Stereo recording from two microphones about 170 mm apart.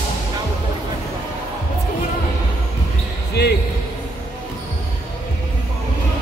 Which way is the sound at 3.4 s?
80° left.